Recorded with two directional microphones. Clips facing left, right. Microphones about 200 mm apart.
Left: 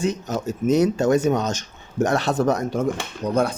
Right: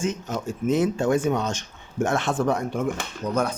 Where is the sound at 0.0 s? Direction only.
40° left (ahead or behind).